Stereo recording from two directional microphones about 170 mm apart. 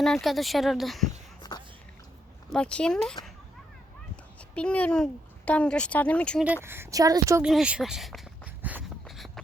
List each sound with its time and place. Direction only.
0.0 s speech: centre (ahead or behind)
1.4 s a sound: 25° left (ahead or behind)
2.5 s speech: 5° left (ahead or behind)
4.4 s a child's voice: 5° left (ahead or behind)
6.4 s speech: 10° right (ahead or behind)
7.4 s a sound: 5° right (ahead or behind)